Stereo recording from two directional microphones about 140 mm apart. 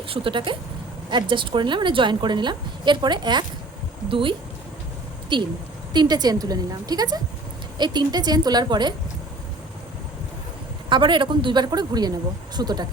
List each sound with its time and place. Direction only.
0.1 s a woman's voice: 35° right (ahead or behind)
10.8 s a woman's voice: 35° right (ahead or behind)